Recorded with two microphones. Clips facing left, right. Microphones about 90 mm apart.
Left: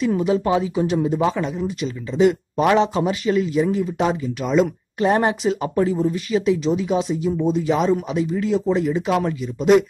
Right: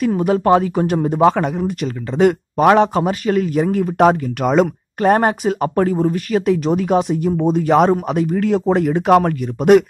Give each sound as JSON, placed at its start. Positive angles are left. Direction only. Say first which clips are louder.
{"t": 0.2, "sound": "speech", "louder": "right 5 dB", "side_deg": -50}